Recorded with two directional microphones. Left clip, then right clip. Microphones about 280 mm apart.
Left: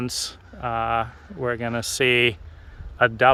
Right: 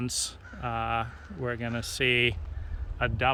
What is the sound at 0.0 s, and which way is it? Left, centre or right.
Speech, centre.